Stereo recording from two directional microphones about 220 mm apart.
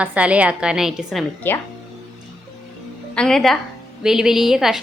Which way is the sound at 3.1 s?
5° left (ahead or behind).